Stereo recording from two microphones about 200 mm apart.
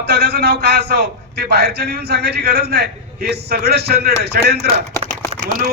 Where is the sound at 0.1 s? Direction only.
55° right (ahead or behind).